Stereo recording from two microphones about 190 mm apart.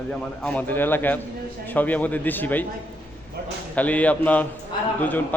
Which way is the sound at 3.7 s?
10° left (ahead or behind).